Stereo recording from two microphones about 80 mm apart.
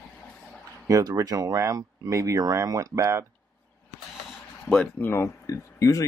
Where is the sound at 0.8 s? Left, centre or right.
Right.